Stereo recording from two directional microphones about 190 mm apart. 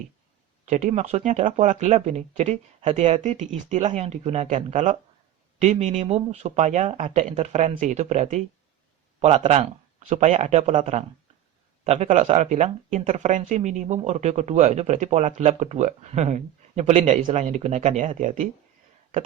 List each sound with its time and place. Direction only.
0.6 s speech: 35° right (ahead or behind)